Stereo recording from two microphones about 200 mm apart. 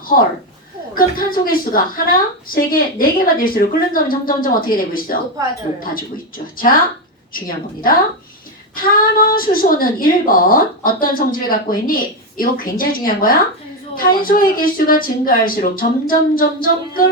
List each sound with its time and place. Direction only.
0.9 s a woman's voice: 45° left (ahead or behind)